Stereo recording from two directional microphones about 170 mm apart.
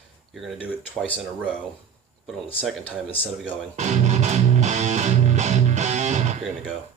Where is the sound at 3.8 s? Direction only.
45° right (ahead or behind).